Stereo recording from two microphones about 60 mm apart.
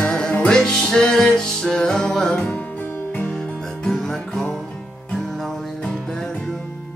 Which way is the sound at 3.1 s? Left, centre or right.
Left.